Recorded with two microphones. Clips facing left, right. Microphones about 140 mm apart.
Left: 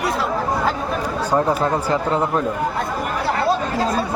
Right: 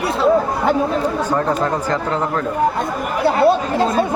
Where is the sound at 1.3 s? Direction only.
10° left (ahead or behind).